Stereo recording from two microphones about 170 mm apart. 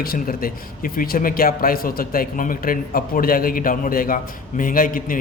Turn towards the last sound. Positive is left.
turn(degrees=55)  # may be behind; listen again after turning